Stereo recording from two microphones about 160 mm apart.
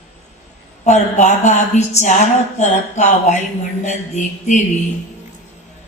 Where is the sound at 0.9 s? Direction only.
45° left (ahead or behind).